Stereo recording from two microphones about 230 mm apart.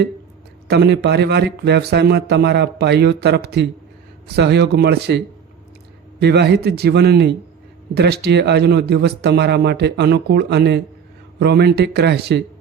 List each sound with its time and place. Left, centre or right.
0.7 s speech: right